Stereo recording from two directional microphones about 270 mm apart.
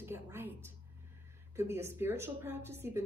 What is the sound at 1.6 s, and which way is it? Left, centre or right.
Speech, centre.